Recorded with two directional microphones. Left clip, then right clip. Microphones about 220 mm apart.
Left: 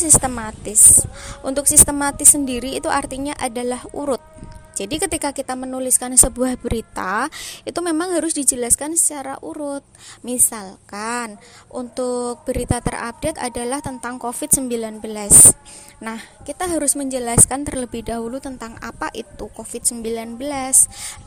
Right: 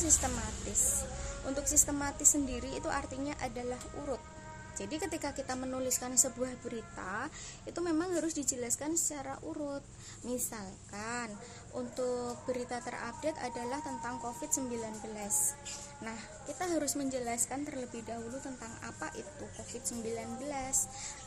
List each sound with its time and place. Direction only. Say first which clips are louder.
1.5 s speech: left 15 dB; 40° left (ahead or behind)
10.2 s music: left 15 dB; 40° left (ahead or behind)
11.7 s speech: left 12 dB; 40° left (ahead or behind)
20.1 s music: left 13 dB; 45° left (ahead or behind)